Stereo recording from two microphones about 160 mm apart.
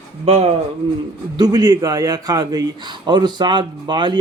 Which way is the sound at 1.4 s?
25° right (ahead or behind).